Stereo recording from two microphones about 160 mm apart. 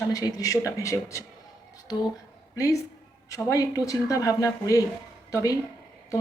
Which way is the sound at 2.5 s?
20° left (ahead or behind).